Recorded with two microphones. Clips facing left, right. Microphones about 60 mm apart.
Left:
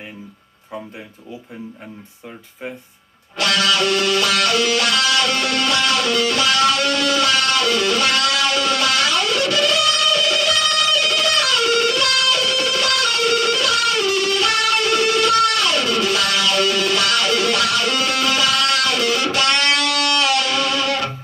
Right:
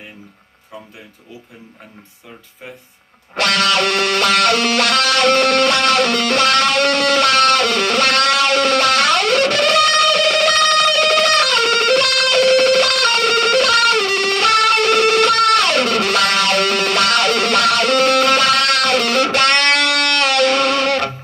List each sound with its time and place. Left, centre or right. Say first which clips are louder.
3.3 s music: right 2 dB; right